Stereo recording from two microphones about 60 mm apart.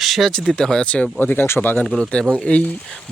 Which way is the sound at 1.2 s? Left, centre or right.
Left.